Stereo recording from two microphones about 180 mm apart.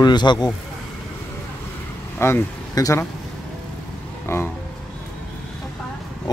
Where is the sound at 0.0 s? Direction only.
25° left (ahead or behind).